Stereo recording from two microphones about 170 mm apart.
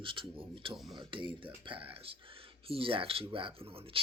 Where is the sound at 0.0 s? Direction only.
30° right (ahead or behind).